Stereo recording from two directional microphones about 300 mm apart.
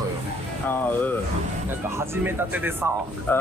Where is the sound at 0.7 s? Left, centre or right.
Centre.